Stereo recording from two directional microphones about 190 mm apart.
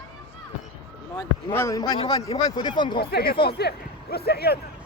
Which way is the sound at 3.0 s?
55° left (ahead or behind).